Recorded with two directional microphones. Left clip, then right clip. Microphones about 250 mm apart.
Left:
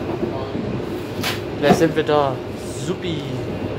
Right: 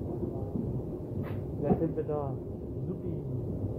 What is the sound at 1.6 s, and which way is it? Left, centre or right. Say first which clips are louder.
Speech: left 15 dB; left.